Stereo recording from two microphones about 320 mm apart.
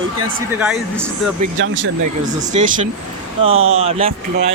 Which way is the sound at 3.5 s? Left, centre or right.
Right.